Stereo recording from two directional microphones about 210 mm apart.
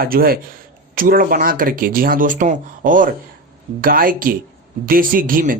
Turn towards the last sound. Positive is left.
turn(degrees=-40)  # may be behind; listen again after turning